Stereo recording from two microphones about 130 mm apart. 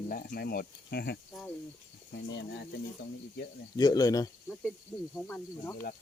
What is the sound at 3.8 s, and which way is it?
Speech, 30° left (ahead or behind).